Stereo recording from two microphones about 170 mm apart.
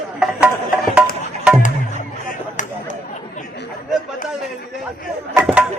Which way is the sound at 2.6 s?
50° left (ahead or behind).